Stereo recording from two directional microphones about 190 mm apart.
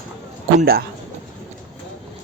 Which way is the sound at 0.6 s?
55° right (ahead or behind).